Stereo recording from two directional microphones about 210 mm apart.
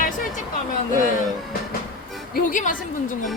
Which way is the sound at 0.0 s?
40° left (ahead or behind).